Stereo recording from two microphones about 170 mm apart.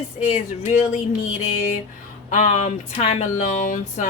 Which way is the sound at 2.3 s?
45° left (ahead or behind).